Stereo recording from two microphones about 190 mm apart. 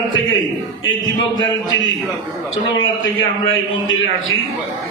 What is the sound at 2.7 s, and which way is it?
A man's voice, 90° left.